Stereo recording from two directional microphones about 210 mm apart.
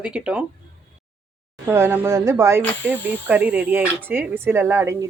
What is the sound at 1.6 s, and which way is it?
Speech, 10° right (ahead or behind).